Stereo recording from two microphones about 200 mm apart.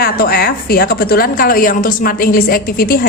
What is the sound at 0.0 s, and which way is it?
A woman's voice, 50° left (ahead or behind).